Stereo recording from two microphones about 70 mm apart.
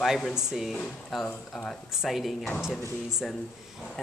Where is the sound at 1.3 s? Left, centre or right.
Centre.